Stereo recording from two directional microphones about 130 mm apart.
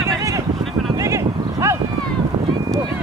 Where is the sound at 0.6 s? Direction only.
Centre (ahead or behind).